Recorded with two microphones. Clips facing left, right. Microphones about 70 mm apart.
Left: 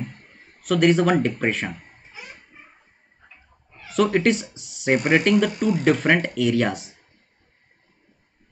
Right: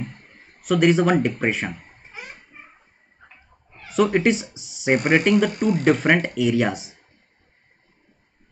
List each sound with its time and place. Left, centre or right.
0.2 s speech: centre
2.0 s a sound: right
3.9 s speech: centre
4.6 s speech: left
4.8 s speech: centre